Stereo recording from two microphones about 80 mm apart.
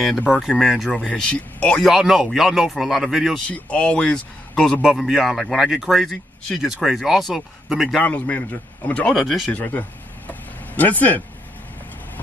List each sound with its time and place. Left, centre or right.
0.3 s a man's voice: centre
1.1 s speech: centre
1.9 s a man's voice: centre
3.3 s speech: centre
4.8 s a man's voice: centre
8.0 s a man's voice: centre
9.1 s a man's voice: centre
9.5 s speech: centre